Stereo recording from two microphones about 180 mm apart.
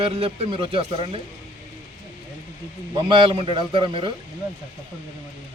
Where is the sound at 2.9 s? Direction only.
25° right (ahead or behind).